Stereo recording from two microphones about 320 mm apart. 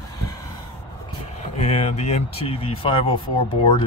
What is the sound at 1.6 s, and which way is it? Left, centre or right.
Speech, centre.